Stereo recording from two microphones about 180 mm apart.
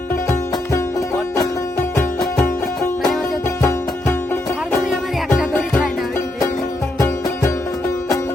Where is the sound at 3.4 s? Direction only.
15° left (ahead or behind).